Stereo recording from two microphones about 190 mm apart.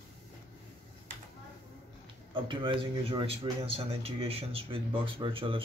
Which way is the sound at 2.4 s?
25° right (ahead or behind).